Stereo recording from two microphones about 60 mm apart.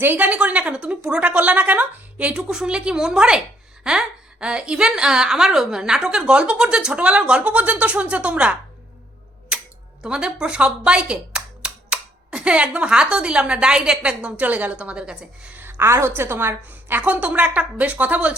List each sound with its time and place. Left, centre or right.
0.0 s a woman's voice: right
2.3 s a woman's voice: centre
10.0 s a woman's voice: centre
15.5 s a woman's voice: right